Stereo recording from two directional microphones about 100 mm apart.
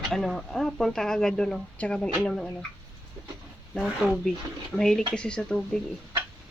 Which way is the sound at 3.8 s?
5° right (ahead or behind).